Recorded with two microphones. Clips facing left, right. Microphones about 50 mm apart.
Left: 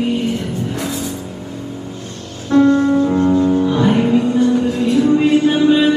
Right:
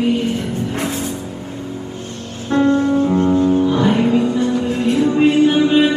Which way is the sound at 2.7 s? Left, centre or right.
Left.